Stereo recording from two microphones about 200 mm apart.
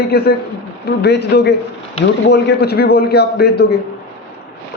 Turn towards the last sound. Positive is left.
turn(degrees=55)  # may be behind; listen again after turning